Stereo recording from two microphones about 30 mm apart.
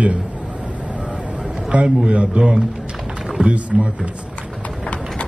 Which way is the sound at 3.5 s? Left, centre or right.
Right.